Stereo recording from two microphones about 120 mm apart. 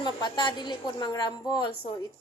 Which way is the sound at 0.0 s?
40° left (ahead or behind).